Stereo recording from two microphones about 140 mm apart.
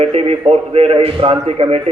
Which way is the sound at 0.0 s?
45° right (ahead or behind).